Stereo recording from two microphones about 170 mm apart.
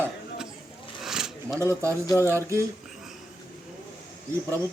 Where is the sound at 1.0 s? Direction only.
5° right (ahead or behind).